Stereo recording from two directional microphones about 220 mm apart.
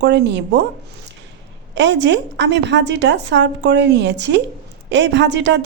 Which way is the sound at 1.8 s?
55° right (ahead or behind).